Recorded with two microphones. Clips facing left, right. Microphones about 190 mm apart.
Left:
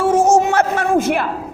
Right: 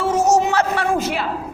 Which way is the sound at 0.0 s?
50° left (ahead or behind).